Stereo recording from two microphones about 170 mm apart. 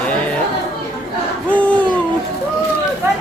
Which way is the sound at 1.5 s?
10° left (ahead or behind).